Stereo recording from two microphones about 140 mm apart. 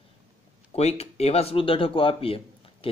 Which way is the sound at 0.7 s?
50° left (ahead or behind).